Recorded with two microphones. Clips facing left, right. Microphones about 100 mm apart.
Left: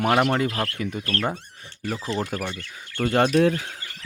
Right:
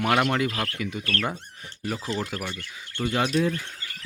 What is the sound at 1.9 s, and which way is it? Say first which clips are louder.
Rub: left 2 dB; 5° left (ahead or behind).